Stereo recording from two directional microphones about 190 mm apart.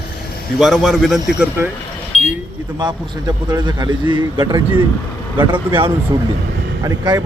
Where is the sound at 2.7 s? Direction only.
20° right (ahead or behind).